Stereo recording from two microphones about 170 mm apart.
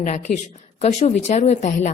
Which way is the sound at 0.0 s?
45° left (ahead or behind).